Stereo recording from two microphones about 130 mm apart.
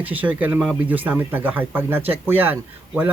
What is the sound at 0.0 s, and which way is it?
A man's voice, 10° right (ahead or behind).